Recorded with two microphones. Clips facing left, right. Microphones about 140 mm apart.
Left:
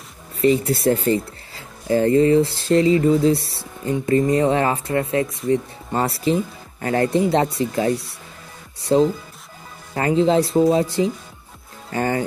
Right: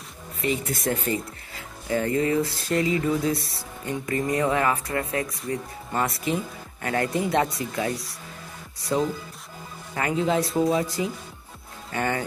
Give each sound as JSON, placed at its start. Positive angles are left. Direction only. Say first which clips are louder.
{"t": 0.4, "sound": "speech", "louder": "left 10 dB", "side_deg": 30}